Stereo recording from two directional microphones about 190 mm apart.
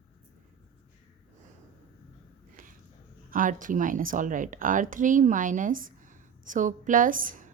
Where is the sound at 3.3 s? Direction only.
45° right (ahead or behind).